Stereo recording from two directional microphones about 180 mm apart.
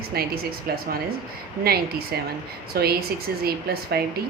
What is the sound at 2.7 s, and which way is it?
A woman's voice, 60° right (ahead or behind).